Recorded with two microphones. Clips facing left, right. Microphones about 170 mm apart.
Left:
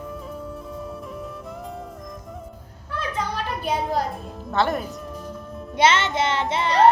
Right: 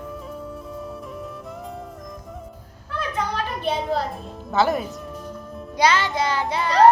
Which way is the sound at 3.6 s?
5° left (ahead or behind).